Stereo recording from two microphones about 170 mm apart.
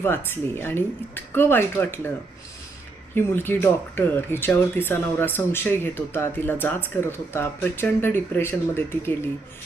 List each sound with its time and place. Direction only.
0.0 s speech: 15° left (ahead or behind)
3.2 s speech: 10° left (ahead or behind)